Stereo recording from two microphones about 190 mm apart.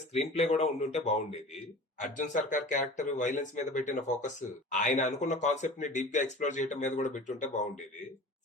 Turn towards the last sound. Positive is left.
turn(degrees=40)  # may be behind; listen again after turning